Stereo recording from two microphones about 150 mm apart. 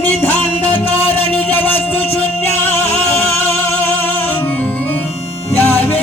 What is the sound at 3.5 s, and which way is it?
Music, 45° left (ahead or behind).